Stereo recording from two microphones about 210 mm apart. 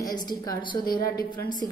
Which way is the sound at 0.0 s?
20° left (ahead or behind).